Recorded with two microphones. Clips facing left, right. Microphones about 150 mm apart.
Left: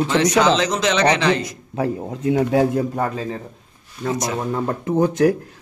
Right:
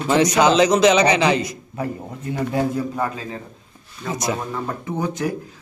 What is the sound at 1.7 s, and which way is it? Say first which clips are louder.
A man's voice: left 7 dB; 90° left.